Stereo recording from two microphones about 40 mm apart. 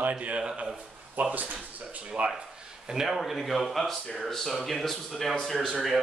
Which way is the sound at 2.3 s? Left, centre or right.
Centre.